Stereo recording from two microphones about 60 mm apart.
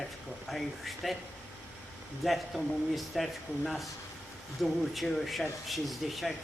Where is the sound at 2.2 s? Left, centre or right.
Centre.